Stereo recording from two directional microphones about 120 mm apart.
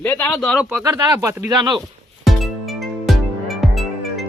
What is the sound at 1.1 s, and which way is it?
Speech, 25° right (ahead or behind).